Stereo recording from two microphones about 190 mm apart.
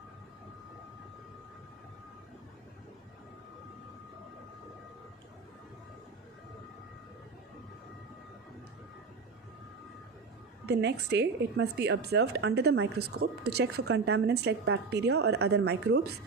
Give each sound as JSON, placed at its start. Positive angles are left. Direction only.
{"t": 10.7, "sound": "a woman's voice", "side_deg": -65}